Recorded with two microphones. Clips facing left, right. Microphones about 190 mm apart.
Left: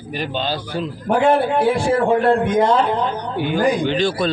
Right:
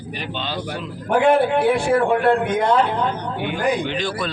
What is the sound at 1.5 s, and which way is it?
Speech, 60° right (ahead or behind).